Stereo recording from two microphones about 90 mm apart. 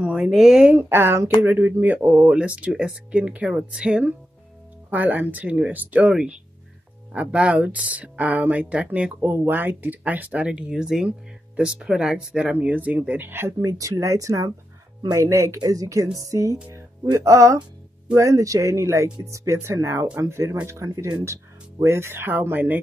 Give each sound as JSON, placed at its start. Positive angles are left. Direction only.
{"t": 0.0, "sound": "speech", "side_deg": -10}
{"t": 0.7, "sound": "speech", "side_deg": -25}
{"t": 13.6, "sound": "speech", "side_deg": -40}
{"t": 16.7, "sound": "music", "side_deg": -40}
{"t": 18.1, "sound": "speech", "side_deg": -35}